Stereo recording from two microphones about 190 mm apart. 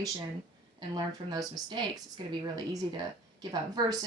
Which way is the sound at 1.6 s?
25° right (ahead or behind).